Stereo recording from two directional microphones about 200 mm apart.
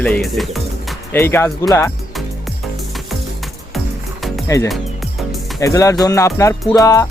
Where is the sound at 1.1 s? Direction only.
10° left (ahead or behind).